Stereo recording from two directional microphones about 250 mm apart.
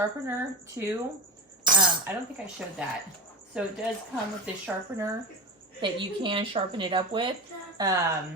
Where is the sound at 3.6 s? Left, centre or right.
Centre.